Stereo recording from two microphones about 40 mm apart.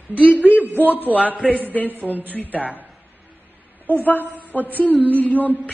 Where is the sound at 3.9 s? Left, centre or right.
Left.